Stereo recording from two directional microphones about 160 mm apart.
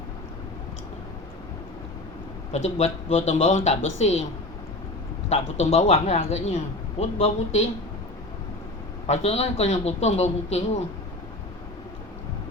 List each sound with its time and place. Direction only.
2.5 s speech: 45° left (ahead or behind)
5.3 s speech: 40° left (ahead or behind)
9.0 s speech: 45° left (ahead or behind)